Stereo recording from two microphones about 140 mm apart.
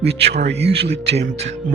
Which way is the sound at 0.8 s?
50° right (ahead or behind).